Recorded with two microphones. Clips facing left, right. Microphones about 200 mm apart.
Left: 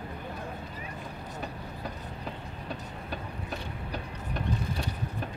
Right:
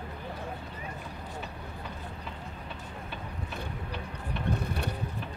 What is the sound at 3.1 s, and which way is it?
Vehicle, 40° left (ahead or behind).